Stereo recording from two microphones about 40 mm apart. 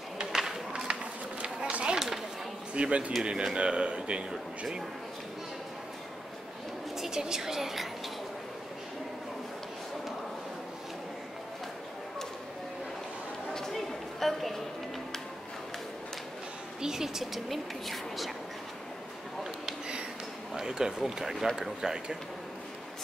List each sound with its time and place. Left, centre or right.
0.3 s a sound: centre
1.4 s run: right
2.7 s speech: right
3.2 s speech: centre
4.3 s speech: centre
7.0 s a woman's voice: centre
13.5 s a sound: centre
16.8 s a woman's voice: centre
20.5 s speech: centre
21.8 s speech: centre